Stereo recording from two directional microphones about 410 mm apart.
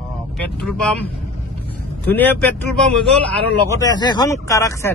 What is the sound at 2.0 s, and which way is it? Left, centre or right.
Speech, centre.